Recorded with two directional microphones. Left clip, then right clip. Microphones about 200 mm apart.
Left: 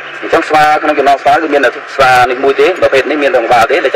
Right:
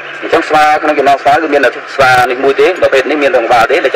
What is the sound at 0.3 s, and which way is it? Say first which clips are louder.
A man's voice: even; 10° right (ahead or behind).